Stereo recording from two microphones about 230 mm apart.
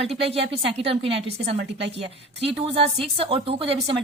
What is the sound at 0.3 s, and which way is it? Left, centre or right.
Speech, right.